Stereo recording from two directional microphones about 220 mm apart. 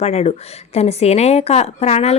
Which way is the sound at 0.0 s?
30° left (ahead or behind).